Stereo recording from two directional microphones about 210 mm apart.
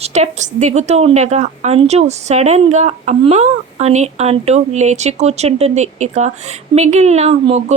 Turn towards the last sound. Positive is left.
turn(degrees=-30)  # may be behind; listen again after turning